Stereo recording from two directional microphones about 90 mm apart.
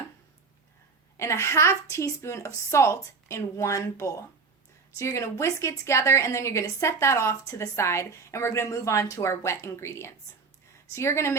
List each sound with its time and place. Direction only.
1.1 s a woman's voice: 35° left (ahead or behind)